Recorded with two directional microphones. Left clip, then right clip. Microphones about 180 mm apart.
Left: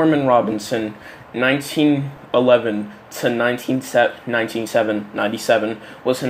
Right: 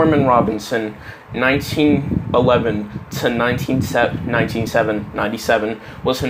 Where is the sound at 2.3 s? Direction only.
10° right (ahead or behind).